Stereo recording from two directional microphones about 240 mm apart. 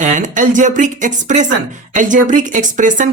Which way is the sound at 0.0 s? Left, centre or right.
Right.